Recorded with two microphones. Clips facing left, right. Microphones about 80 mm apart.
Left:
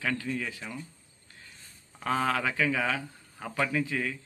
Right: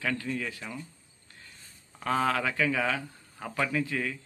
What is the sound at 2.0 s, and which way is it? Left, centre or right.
Speech, centre.